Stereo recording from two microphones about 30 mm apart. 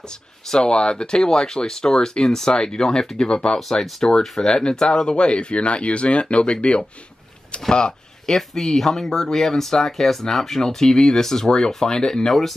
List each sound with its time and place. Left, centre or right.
0.1 s speech: left
8.3 s speech: centre